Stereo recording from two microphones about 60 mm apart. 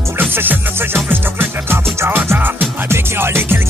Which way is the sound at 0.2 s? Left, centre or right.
Right.